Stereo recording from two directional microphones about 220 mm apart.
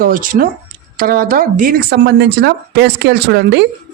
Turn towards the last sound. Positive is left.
turn(degrees=-50)  # may be behind; listen again after turning